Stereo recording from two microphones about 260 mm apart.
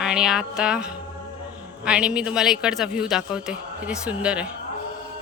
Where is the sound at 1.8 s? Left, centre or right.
Centre.